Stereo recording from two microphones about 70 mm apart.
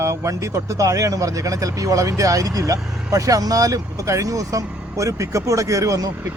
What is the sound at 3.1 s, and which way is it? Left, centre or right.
Speech, right.